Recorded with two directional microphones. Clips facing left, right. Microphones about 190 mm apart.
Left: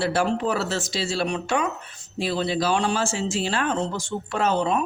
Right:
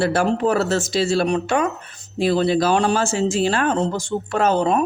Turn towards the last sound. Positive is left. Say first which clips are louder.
# right 5 dB
turn(degrees=-45)  # may be behind; listen again after turning